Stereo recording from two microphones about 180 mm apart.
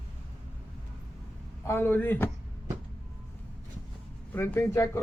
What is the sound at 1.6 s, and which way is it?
Speech, 10° left (ahead or behind).